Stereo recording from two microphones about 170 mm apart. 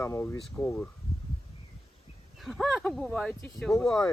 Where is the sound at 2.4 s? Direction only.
Centre (ahead or behind).